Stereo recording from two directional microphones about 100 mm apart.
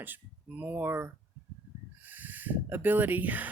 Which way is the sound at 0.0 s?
20° right (ahead or behind).